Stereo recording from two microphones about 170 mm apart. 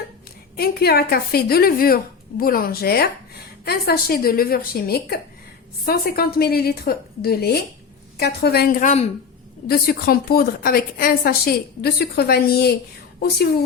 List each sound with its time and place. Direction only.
0.5 s a woman's voice: 65° left (ahead or behind); by 9.0 s 45° left (ahead or behind)
9.6 s a woman's voice: 65° left (ahead or behind)